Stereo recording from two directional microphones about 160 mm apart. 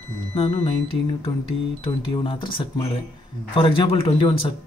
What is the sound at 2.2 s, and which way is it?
Speech, 35° left (ahead or behind).